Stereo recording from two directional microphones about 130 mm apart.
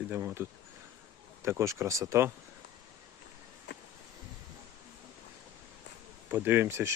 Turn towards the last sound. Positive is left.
turn(degrees=-20)  # may be behind; listen again after turning